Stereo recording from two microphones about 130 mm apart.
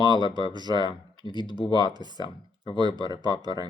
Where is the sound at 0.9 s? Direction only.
35° left (ahead or behind).